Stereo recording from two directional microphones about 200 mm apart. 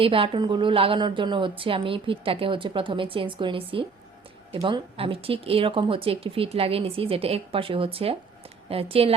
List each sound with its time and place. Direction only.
0.0 s a woman's voice: 25° right (ahead or behind)